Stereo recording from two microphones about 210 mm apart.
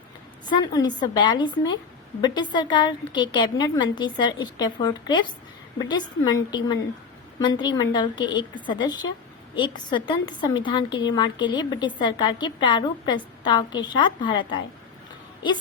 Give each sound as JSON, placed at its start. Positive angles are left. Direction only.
{"t": 0.4, "sound": "a woman's voice", "side_deg": 20}